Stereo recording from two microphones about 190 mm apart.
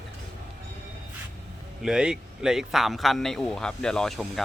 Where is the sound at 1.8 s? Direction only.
5° right (ahead or behind).